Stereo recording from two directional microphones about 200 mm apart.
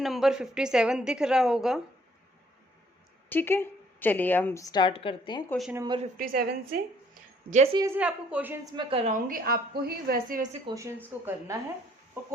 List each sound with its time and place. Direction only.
0.0 s a woman's voice: centre (ahead or behind)
3.2 s a woman's voice: 10° left (ahead or behind)
5.5 s a woman's voice: centre (ahead or behind)
5.7 s speech: 20° right (ahead or behind)
6.1 s a woman's voice: 45° right (ahead or behind)
7.1 s a sound: 35° right (ahead or behind)
7.8 s speech: 10° right (ahead or behind)
8.7 s a woman's voice: 25° right (ahead or behind); by 10.6 s 45° right (ahead or behind)
10.7 s speech: 15° right (ahead or behind)